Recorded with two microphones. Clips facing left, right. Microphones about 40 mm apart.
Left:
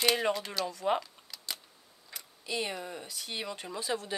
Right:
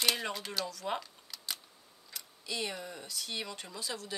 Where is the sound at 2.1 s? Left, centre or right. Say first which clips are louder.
Left 3 dB; left.